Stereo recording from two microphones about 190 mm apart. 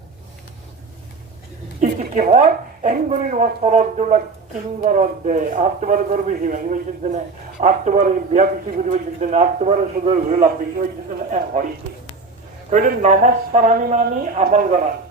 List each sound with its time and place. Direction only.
1.8 s a man's voice: 40° right (ahead or behind)
12.7 s a man's voice: 40° right (ahead or behind)